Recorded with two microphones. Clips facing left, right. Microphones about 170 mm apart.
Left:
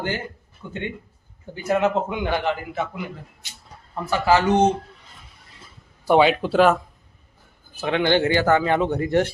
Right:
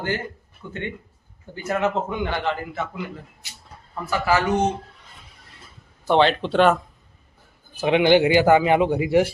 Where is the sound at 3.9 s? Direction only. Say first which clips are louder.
Left 2 dB; 25° left (ahead or behind).